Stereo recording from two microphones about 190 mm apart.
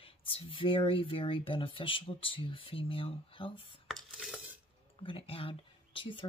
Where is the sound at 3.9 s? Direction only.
Centre (ahead or behind).